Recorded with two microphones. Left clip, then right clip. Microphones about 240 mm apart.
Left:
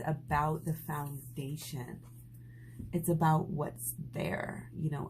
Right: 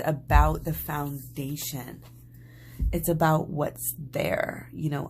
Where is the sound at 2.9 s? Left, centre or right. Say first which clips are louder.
Right 7 dB; right.